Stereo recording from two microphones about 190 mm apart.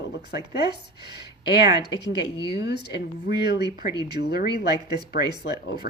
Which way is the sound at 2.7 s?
60° left (ahead or behind).